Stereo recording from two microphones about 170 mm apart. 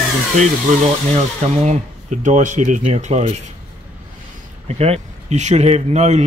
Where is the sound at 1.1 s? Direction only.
40° right (ahead or behind).